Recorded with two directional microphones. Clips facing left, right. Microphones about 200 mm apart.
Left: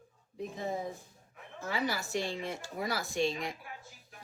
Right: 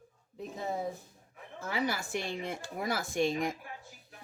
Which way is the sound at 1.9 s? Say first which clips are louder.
Left 1 dB; 50° right (ahead or behind).